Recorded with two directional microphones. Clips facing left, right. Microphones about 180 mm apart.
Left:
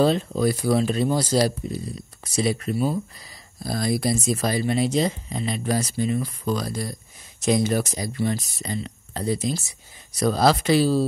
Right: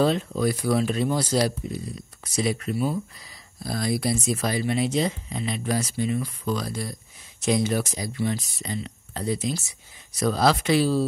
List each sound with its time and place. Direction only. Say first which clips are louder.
0.0 s speech: left 2 dB; 35° left (ahead or behind)